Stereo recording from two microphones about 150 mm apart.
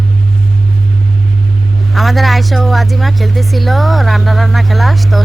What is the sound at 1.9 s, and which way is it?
A woman's voice, centre (ahead or behind).